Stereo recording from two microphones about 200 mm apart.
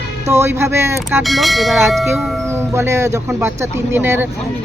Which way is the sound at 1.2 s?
Centre (ahead or behind).